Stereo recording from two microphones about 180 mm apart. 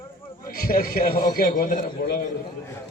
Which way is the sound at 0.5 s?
55° left (ahead or behind).